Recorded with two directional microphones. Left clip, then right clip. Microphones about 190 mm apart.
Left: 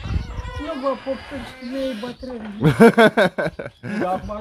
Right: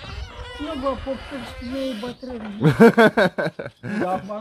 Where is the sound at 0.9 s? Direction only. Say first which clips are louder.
Left 2 dB; 30° right (ahead or behind).